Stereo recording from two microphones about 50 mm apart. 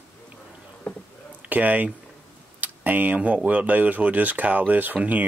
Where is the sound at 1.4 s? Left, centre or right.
Right.